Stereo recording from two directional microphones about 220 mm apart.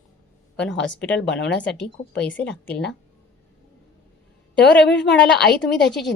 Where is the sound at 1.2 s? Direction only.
50° left (ahead or behind).